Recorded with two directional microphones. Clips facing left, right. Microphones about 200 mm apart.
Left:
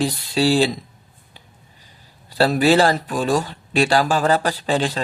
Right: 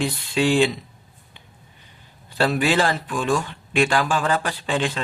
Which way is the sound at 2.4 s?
40° left (ahead or behind).